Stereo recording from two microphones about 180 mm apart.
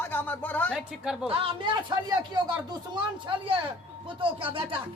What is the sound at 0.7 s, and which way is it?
Speech, 5° right (ahead or behind).